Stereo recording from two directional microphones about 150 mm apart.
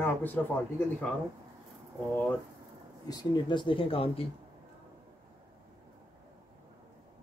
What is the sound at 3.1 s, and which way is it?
Speech, 30° left (ahead or behind).